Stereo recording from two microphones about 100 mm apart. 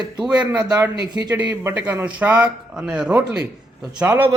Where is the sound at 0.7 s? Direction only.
40° right (ahead or behind).